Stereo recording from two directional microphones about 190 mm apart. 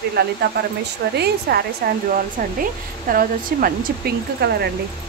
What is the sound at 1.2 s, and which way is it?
Speech, 55° right (ahead or behind).